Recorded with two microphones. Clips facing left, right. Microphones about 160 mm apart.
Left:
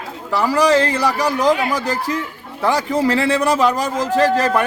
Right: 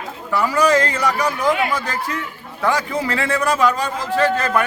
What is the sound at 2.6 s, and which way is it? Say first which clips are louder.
A man's voice: left 3 dB; 35° left (ahead or behind).